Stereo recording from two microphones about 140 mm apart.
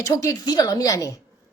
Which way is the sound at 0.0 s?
25° left (ahead or behind).